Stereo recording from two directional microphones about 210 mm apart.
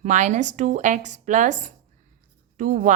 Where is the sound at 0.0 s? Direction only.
35° right (ahead or behind).